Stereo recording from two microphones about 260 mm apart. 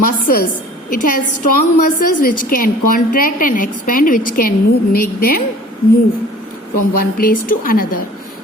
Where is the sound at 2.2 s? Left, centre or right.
Left.